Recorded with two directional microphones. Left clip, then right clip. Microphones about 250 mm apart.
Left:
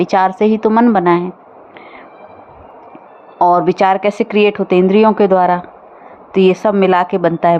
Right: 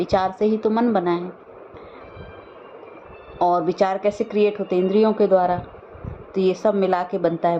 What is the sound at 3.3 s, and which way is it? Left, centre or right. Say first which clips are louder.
A woman's voice: left 8 dB; left.